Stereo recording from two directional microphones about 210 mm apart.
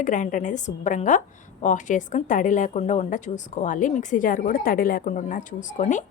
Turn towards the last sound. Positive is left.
turn(degrees=35)  # may be behind; listen again after turning